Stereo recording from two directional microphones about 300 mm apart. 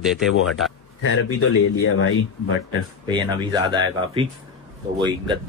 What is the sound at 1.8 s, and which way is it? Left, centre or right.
Speech, left.